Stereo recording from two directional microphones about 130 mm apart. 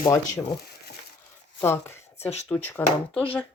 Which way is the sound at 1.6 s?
20° left (ahead or behind).